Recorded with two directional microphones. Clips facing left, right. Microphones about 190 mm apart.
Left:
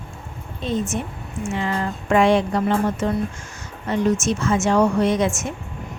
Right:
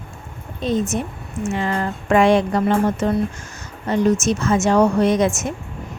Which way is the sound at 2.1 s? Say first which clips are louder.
Right 2 dB; 50° right (ahead or behind).